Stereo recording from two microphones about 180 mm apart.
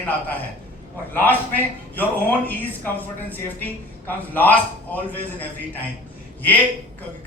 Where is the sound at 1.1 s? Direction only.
10° left (ahead or behind).